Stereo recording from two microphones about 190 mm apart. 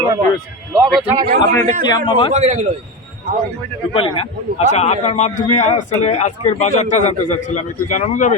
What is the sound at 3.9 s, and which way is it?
A man's voice, 30° left (ahead or behind).